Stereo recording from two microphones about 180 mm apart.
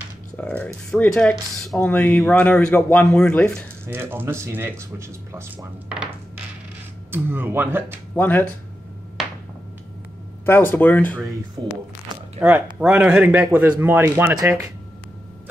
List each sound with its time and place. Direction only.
0.4 s speech: 5° left (ahead or behind)
3.8 s speech: 10° right (ahead or behind)
7.1 s speech: 10° right (ahead or behind)
8.2 s speech: 10° left (ahead or behind)
10.4 s speech: 10° left (ahead or behind)
11.6 s speech: 25° right (ahead or behind)
12.4 s speech: 10° right (ahead or behind)